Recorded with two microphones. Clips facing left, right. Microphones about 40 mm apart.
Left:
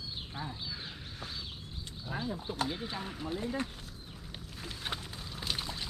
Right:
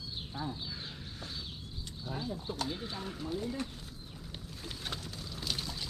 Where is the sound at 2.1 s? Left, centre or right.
Left.